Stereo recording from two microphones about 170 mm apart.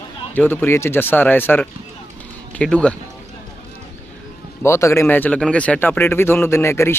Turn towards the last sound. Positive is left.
turn(degrees=15)  # may be behind; listen again after turning